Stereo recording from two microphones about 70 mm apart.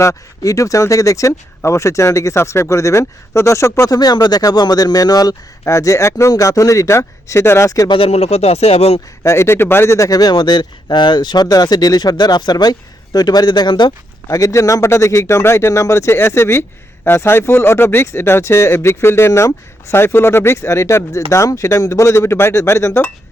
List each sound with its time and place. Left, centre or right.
0.0 s speech: left
3.8 s speech: left
9.2 s speech: left
10.1 s speech: left
13.1 s speech: left
14.3 s speech: left